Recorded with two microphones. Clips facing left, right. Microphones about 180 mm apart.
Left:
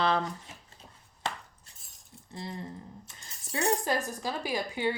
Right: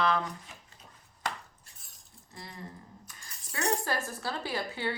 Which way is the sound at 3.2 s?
25° left (ahead or behind).